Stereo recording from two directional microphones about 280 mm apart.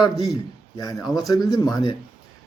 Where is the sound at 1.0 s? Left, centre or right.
Centre.